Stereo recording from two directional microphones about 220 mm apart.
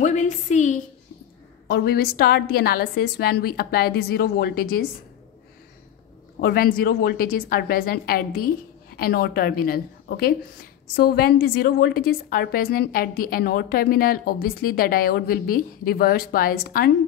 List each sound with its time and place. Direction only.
0.0 s a woman's voice: 30° left (ahead or behind)
1.7 s a woman's voice: 45° left (ahead or behind)
6.4 s a woman's voice: 40° left (ahead or behind)